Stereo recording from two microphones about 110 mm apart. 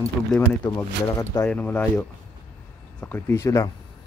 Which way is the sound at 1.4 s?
15° left (ahead or behind).